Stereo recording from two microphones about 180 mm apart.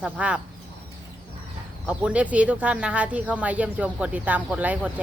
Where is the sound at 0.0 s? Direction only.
5° right (ahead or behind).